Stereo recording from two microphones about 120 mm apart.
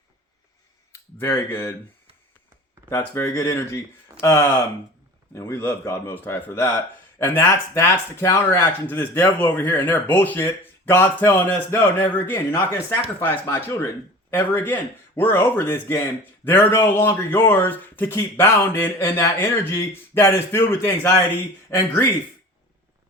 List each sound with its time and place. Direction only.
0.9 s speech: 25° left (ahead or behind)
3.3 s speech: 25° left (ahead or behind)